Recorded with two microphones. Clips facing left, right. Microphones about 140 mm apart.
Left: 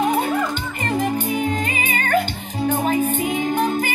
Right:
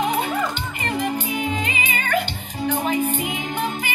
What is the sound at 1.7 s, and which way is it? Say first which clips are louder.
Music: left 3 dB; 45° left (ahead or behind).